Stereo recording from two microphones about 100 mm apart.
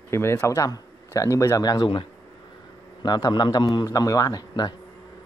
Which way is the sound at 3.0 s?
40° left (ahead or behind).